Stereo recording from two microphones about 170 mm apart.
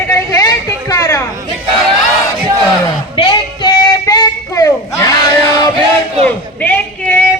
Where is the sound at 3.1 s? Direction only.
30° left (ahead or behind).